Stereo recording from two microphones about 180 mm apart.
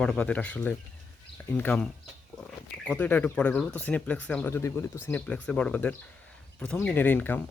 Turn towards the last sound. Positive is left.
turn(degrees=10)  # may be behind; listen again after turning